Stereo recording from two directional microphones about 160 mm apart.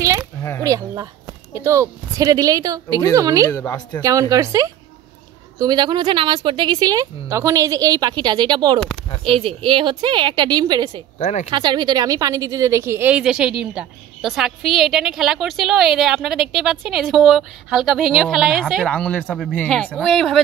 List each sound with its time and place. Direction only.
0.4 s speech: 15° left (ahead or behind)
0.7 s speech: 20° right (ahead or behind)
3.4 s a woman's voice: 20° left (ahead or behind)
4.0 s a woman's voice: 20° right (ahead or behind)
11.1 s speech: 45° left (ahead or behind)
11.5 s speech: 25° right (ahead or behind); by 20.4 s centre (ahead or behind)